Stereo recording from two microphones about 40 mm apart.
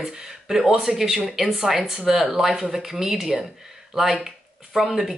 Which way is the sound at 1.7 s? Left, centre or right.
Right.